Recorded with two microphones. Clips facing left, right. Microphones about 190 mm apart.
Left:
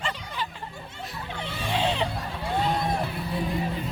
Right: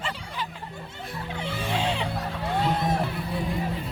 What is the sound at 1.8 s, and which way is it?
Music, 10° right (ahead or behind).